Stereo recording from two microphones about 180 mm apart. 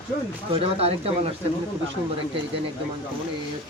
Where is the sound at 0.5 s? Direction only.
30° right (ahead or behind).